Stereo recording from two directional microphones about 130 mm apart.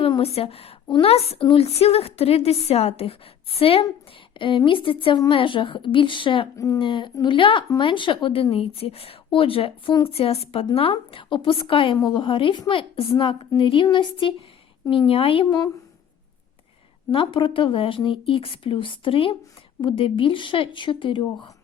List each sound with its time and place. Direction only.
0.0 s a woman's voice: 50° left (ahead or behind)
17.1 s a woman's voice: 40° left (ahead or behind)